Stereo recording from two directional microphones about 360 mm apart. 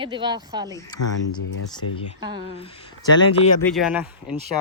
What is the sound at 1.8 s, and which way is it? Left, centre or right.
Speech, left.